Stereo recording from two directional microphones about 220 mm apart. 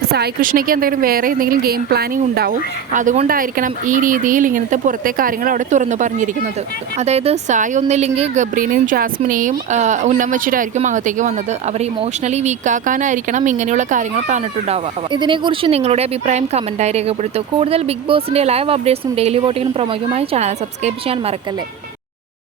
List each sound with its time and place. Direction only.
0.1 s a woman's voice: 45° right (ahead or behind)
15.1 s speech: 20° right (ahead or behind)